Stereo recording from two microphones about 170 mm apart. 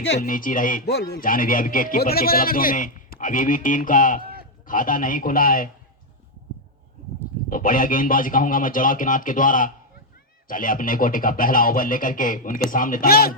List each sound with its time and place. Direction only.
0.2 s speech: 55° left (ahead or behind)
0.9 s speech: 75° left (ahead or behind); by 5.6 s 55° left (ahead or behind)
7.5 s speech: 55° left (ahead or behind)